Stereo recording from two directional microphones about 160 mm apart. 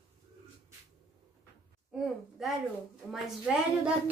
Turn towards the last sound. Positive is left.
turn(degrees=-5)  # may be behind; listen again after turning